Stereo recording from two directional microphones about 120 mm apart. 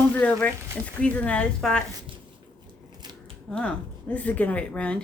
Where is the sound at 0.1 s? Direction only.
10° left (ahead or behind).